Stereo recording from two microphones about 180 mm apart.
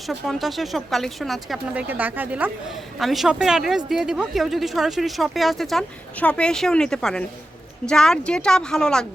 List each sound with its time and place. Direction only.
0.1 s speech: centre (ahead or behind)